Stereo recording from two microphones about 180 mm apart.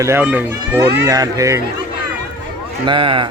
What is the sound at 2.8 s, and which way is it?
Speech, 30° right (ahead or behind).